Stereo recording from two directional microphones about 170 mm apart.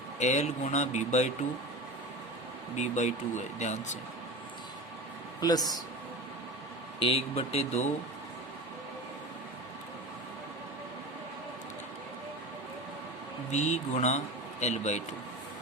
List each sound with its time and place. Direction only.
0.2 s speech: 45° left (ahead or behind)
2.7 s speech: 45° left (ahead or behind)
5.4 s speech: 25° left (ahead or behind)
7.0 s speech: 35° left (ahead or behind)
13.5 s speech: 45° left (ahead or behind)